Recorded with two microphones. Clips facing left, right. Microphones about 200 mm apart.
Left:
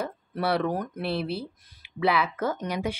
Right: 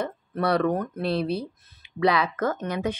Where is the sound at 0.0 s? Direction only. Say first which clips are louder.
Right 2 dB; 5° left (ahead or behind).